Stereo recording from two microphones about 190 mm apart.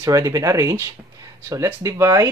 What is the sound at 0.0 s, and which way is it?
Speech, 15° right (ahead or behind).